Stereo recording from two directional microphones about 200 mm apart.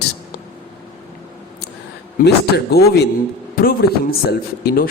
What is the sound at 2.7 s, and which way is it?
A man's voice, 50° left (ahead or behind).